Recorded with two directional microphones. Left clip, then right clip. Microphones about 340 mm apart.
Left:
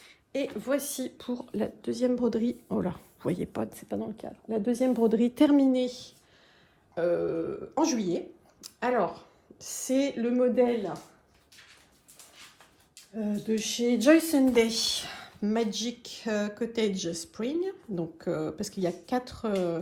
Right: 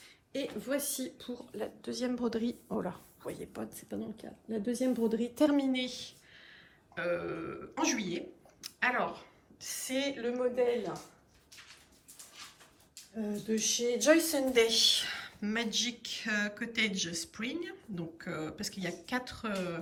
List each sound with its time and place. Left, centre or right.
0.6 s a woman's voice: centre
13.5 s speech: left